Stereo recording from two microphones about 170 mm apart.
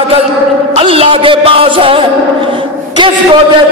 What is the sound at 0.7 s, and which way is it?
Music, 35° right (ahead or behind).